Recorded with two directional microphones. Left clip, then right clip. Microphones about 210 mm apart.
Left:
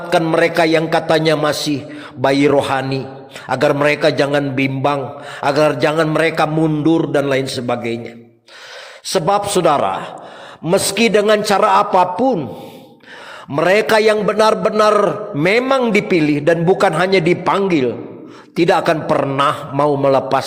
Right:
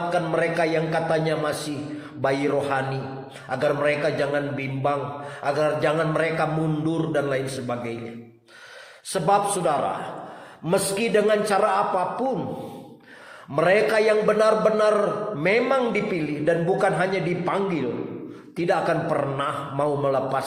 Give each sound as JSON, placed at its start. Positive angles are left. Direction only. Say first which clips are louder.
{"t": 0.1, "sound": "a man's voice", "louder": "left 12 dB", "side_deg": 50}
{"t": 9.0, "sound": "a man's voice", "louder": "left 5 dB", "side_deg": 40}
{"t": 13.5, "sound": "a man's voice", "louder": "left 6 dB", "side_deg": 45}